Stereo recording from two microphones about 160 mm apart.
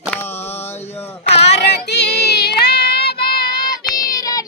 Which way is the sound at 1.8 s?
90° left.